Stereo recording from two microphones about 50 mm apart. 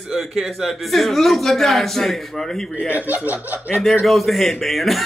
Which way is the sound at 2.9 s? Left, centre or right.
Right.